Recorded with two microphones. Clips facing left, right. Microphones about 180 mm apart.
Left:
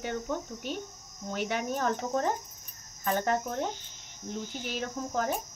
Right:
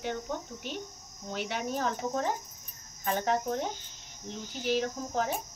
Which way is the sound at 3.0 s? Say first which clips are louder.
Left 1 dB; 45° left (ahead or behind).